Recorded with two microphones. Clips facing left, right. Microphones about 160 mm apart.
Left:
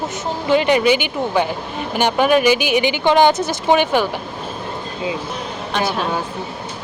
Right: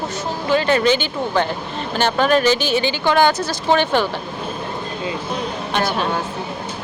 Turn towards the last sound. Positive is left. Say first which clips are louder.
# even
turn(degrees=0)  # may be behind; listen again after turning